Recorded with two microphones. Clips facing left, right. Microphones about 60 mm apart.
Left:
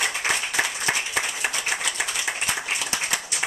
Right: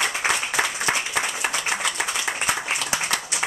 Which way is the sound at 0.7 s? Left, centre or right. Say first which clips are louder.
Right 2 dB; right.